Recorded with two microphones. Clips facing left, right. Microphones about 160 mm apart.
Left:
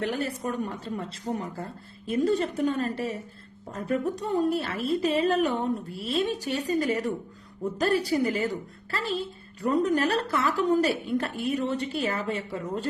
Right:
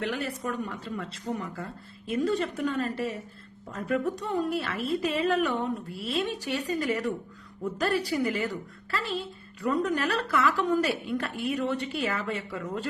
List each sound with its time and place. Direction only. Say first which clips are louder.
0.0 s a woman's voice: left 2 dB; 40° left (ahead or behind)